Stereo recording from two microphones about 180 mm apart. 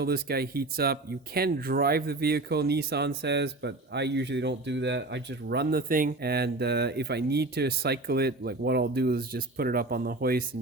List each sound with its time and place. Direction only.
0.0 s speech: 60° right (ahead or behind)